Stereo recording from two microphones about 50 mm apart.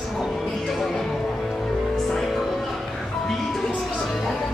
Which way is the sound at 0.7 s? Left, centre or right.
Centre.